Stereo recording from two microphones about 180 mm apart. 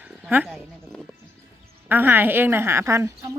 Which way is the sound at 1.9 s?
10° right (ahead or behind).